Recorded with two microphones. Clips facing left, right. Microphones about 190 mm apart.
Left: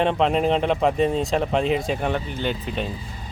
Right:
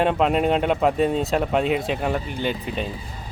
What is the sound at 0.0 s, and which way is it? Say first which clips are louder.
Speech: even; 5° right (ahead or behind).